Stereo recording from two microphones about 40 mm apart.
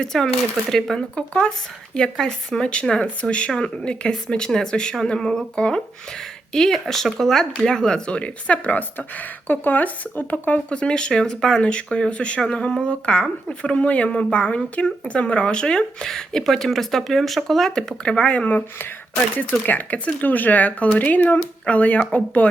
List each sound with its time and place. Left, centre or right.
0.0 s speech: centre
1.1 s speech: left
6.5 s speech: centre; by 8.8 s left
9.5 s speech: left
10.7 s speech: left; by 17.7 s centre
18.0 s speech: left